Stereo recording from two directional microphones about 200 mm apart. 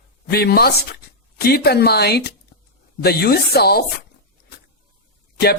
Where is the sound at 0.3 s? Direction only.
50° left (ahead or behind).